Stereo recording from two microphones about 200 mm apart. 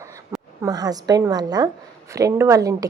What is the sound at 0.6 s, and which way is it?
A woman's voice, 20° right (ahead or behind).